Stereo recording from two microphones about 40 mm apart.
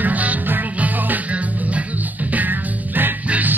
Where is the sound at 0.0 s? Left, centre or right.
Right.